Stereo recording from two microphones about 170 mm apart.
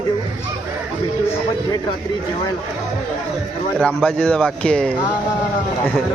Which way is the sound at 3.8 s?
5° left (ahead or behind).